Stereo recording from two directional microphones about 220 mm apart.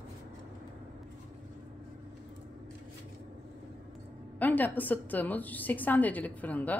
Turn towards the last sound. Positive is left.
turn(degrees=5)  # may be behind; listen again after turning